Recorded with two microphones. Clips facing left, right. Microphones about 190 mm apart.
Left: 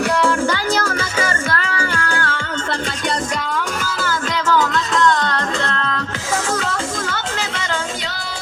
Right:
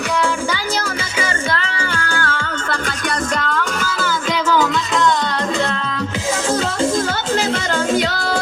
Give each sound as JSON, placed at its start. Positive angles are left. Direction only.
{"t": 2.0, "sound": "music", "side_deg": 35}
{"t": 5.0, "sound": "music", "side_deg": -10}